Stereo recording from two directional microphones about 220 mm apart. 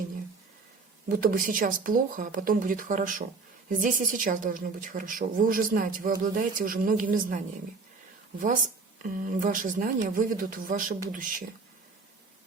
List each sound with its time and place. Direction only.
1.0 s a woman's voice: 40° right (ahead or behind)